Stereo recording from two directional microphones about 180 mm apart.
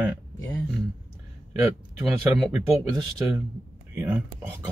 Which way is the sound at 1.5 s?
15° right (ahead or behind).